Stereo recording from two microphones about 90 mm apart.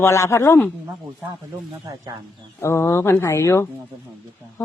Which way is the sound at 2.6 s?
30° left (ahead or behind).